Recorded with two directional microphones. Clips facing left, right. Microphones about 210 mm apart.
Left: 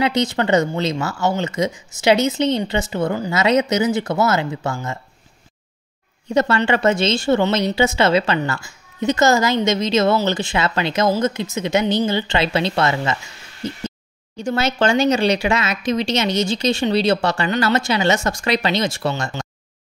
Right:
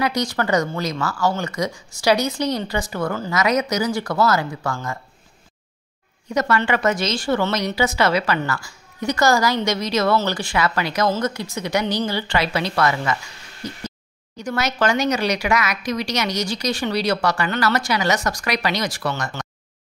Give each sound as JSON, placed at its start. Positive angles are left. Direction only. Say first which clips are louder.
{"t": 0.0, "sound": "speech", "louder": "left 3 dB", "side_deg": 25}
{"t": 6.3, "sound": "speech", "louder": "left 3 dB", "side_deg": 30}